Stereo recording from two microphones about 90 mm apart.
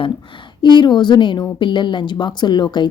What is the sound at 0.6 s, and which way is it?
A woman's voice, 60° left (ahead or behind).